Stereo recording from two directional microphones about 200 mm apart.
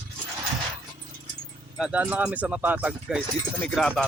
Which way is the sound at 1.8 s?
5° right (ahead or behind).